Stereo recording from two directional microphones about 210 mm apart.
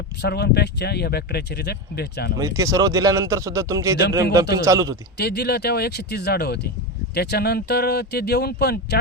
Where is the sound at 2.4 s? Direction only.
15° right (ahead or behind).